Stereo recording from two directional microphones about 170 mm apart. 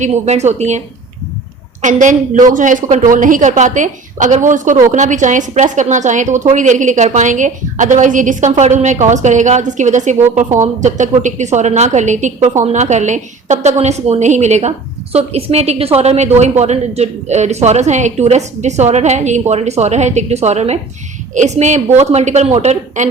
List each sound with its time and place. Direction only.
0.0 s a woman's voice: 40° right (ahead or behind)
1.8 s a woman's voice: 50° right (ahead or behind)